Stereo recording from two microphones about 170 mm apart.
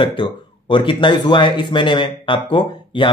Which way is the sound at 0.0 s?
30° left (ahead or behind).